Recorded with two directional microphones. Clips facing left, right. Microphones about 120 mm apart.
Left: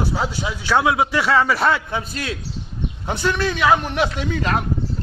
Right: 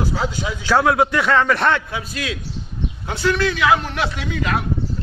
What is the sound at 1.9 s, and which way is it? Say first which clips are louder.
Speech: left 2 dB; 30° left (ahead or behind).